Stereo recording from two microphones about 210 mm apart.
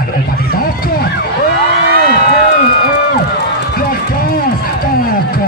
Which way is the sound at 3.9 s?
45° left (ahead or behind).